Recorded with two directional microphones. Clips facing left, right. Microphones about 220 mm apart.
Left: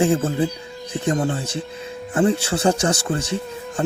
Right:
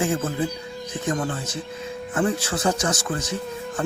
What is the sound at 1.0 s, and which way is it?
Speech, 35° left (ahead or behind).